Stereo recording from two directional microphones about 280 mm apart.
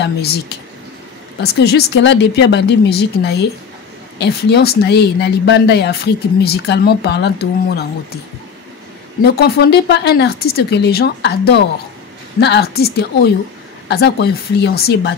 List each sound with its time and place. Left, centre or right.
0.0 s speech: left
1.4 s speech: left
9.2 s speech: left